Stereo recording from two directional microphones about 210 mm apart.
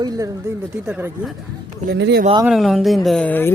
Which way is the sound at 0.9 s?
10° right (ahead or behind).